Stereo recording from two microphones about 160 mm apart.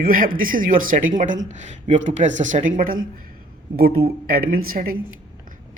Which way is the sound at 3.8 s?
70° right (ahead or behind).